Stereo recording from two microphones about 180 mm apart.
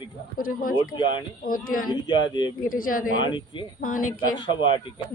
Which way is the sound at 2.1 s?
25° left (ahead or behind).